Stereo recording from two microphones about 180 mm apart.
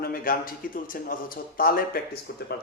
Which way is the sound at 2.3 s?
60° left (ahead or behind).